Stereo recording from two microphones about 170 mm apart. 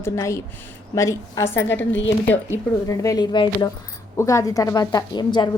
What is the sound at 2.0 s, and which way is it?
Speech, 90° left.